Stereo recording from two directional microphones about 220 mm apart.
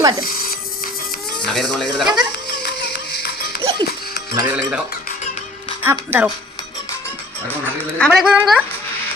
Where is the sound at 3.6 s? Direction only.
25° right (ahead or behind).